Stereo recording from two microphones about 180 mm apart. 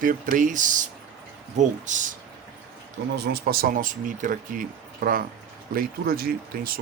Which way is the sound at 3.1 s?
65° right (ahead or behind).